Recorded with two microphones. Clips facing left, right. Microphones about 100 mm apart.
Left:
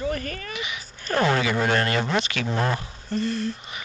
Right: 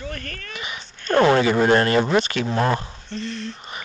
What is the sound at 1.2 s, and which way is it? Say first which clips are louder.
Speech: right 5 dB; 35° right (ahead or behind).